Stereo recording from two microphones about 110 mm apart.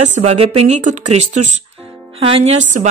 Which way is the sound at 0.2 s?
75° right (ahead or behind).